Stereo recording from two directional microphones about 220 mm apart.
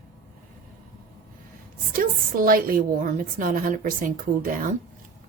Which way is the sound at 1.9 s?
40° right (ahead or behind).